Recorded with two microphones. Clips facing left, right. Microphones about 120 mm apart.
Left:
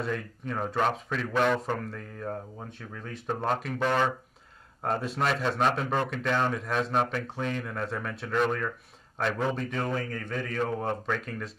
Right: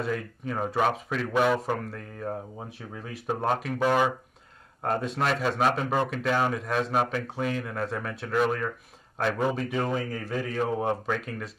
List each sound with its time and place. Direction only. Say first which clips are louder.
0.0 s speech: right 2 dB; 5° right (ahead or behind)